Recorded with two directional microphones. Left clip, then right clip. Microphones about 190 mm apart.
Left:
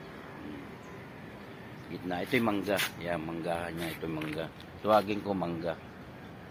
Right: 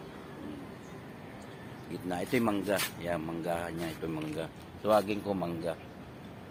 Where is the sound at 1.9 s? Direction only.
10° left (ahead or behind).